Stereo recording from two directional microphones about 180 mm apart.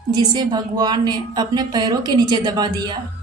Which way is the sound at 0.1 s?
20° right (ahead or behind).